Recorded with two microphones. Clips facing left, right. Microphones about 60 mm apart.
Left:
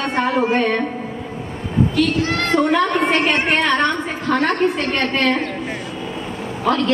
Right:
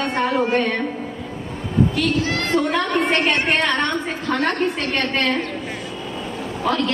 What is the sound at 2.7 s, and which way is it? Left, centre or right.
A woman's voice, centre.